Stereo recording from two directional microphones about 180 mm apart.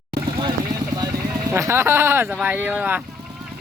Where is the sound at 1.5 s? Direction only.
15° right (ahead or behind).